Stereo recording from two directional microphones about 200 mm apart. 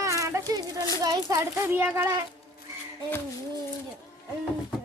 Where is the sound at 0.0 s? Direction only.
15° right (ahead or behind).